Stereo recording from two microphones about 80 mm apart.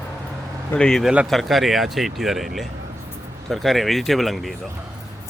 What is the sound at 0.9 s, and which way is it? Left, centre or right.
Speech, centre.